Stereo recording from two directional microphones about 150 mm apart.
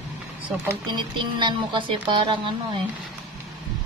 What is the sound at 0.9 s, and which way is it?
A woman's voice, 30° right (ahead or behind).